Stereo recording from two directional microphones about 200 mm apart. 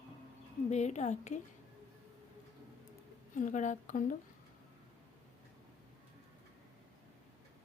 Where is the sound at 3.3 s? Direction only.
40° left (ahead or behind).